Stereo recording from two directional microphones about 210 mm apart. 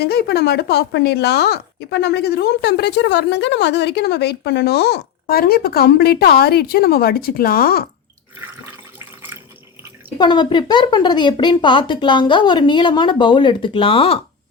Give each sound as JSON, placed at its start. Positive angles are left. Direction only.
{"t": 0.0, "sound": "speech", "side_deg": 50}
{"t": 8.4, "sound": "water", "side_deg": -10}
{"t": 10.2, "sound": "speech", "side_deg": 20}